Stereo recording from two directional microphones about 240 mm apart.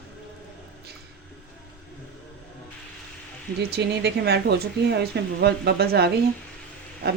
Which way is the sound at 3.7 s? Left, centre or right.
Right.